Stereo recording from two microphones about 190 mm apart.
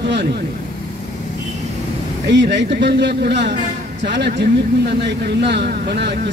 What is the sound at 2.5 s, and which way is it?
Speech, 65° right (ahead or behind).